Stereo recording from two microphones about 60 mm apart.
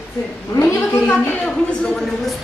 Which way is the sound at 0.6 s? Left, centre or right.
Left.